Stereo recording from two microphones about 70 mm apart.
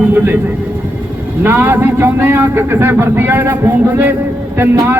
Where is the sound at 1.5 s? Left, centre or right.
Right.